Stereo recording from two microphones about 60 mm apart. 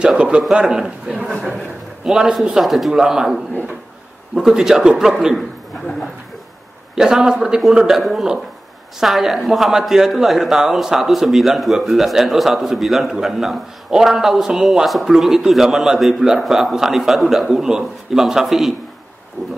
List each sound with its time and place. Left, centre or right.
0.0 s a man's voice: centre
7.0 s a man's voice: centre